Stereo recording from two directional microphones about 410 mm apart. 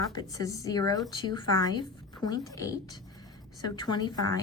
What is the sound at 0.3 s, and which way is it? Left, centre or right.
A woman's voice, centre.